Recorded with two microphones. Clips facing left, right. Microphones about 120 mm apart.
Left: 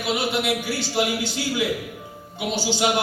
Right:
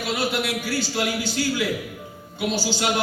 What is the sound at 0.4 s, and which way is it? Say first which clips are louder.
A man's voice: left 1 dB; 20° left (ahead or behind).